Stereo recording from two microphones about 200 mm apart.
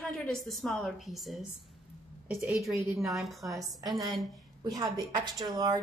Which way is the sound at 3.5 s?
15° right (ahead or behind).